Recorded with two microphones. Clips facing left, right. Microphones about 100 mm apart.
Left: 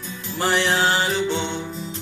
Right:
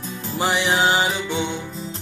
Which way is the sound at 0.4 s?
15° right (ahead or behind).